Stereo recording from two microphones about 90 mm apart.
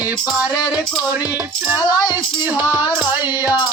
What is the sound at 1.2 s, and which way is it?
Music, 20° right (ahead or behind).